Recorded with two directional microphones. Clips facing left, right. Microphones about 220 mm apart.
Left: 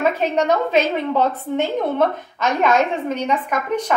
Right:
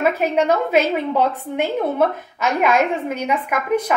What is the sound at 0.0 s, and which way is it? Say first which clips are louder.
A woman's voice: right 1 dB; 10° right (ahead or behind).